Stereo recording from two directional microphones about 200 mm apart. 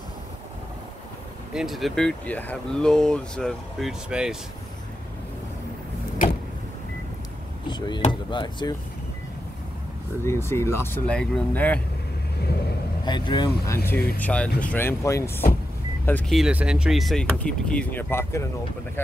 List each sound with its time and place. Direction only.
1.5 s speech: centre (ahead or behind)
7.6 s speech: 20° left (ahead or behind)
10.2 s speech: 15° left (ahead or behind)
13.0 s speech: 20° left (ahead or behind)
14.2 s speech: 5° left (ahead or behind)